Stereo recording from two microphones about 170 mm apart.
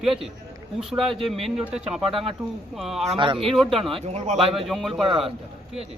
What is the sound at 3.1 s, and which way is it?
Speech, 30° right (ahead or behind).